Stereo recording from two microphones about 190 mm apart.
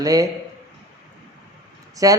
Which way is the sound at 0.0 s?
20° right (ahead or behind).